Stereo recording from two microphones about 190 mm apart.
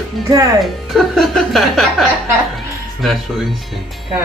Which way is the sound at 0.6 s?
Centre (ahead or behind).